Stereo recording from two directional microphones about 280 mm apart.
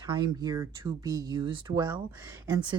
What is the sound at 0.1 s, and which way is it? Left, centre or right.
Speech, centre.